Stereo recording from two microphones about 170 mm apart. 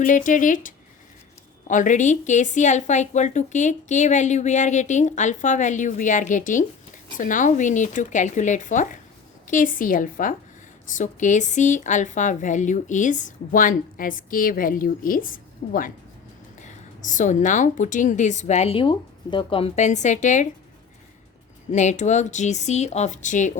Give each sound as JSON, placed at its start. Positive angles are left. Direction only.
{"t": 0.0, "sound": "a woman's voice", "side_deg": 50}
{"t": 21.7, "sound": "a woman's voice", "side_deg": 45}